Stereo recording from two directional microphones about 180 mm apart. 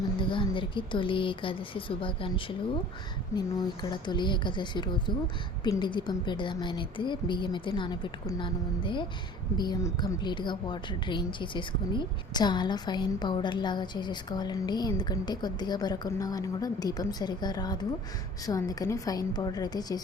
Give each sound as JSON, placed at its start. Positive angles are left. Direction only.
{"t": 0.2, "sound": "a woman's voice", "side_deg": 30}
{"t": 3.3, "sound": "a woman's voice", "side_deg": 15}